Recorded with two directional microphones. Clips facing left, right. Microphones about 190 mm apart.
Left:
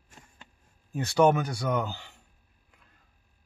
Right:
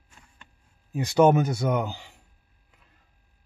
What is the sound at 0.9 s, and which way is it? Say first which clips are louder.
Speech: right 3 dB; 15° right (ahead or behind).